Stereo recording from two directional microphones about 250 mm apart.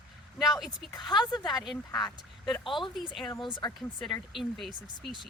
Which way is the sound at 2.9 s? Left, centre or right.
Centre.